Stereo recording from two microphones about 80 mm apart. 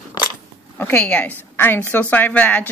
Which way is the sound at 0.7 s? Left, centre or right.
Left.